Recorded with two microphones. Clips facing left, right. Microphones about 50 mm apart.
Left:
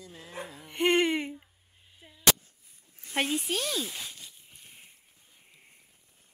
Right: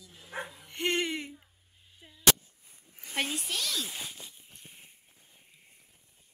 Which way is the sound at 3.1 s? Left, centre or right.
Centre.